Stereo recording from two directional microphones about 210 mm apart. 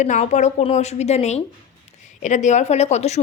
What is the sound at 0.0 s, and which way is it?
A woman's voice, 35° left (ahead or behind).